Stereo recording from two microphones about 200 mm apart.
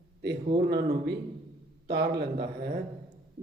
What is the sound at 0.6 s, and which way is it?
Speech, 60° right (ahead or behind).